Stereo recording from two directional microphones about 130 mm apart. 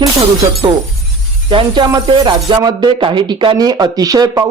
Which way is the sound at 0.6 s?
30° right (ahead or behind).